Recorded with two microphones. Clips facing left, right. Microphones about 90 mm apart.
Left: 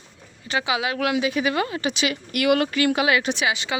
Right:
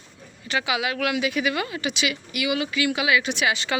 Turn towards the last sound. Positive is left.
turn(degrees=15)  # may be behind; listen again after turning